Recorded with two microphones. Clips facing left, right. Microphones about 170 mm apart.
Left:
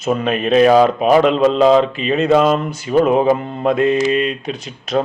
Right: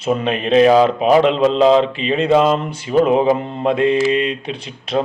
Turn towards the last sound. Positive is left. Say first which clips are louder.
# left 1 dB
turn(degrees=-30)  # may be behind; listen again after turning